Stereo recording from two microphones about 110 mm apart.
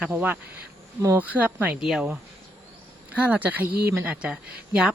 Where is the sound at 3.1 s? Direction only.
15° right (ahead or behind).